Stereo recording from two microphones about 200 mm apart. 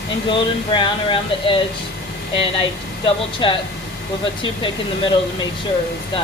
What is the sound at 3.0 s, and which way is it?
Speech, 25° left (ahead or behind).